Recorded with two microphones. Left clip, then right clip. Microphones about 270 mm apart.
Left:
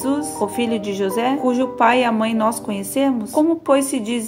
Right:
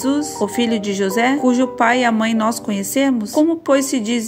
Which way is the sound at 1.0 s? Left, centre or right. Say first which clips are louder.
Right 3 dB; right.